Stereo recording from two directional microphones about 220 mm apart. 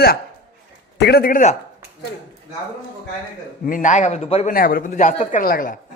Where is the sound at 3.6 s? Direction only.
35° left (ahead or behind).